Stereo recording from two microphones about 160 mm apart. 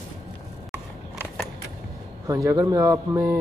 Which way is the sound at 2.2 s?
20° right (ahead or behind).